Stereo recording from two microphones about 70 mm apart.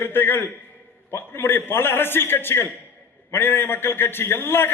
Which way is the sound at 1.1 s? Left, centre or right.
Left.